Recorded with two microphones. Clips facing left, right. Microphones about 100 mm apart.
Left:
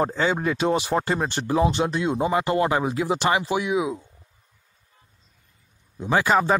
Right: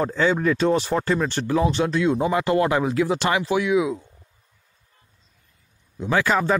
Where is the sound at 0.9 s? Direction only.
25° left (ahead or behind); by 4.0 s 5° left (ahead or behind).